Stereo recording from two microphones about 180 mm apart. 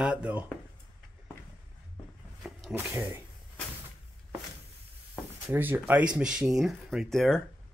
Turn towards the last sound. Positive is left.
turn(degrees=0)  # may be behind; listen again after turning